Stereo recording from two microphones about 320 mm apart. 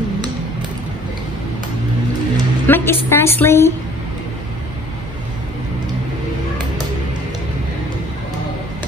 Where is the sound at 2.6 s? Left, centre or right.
Centre.